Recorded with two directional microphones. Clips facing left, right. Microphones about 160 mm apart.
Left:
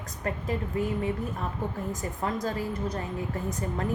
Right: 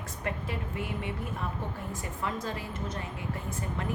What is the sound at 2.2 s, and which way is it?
A woman's voice, 40° left (ahead or behind).